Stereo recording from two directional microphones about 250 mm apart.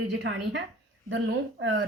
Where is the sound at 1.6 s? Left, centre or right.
Right.